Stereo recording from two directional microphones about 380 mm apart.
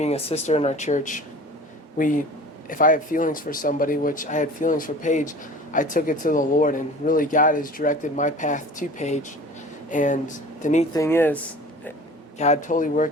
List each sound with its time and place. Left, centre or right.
0.0 s speech: centre
11.0 s speech: centre
12.4 s speech: centre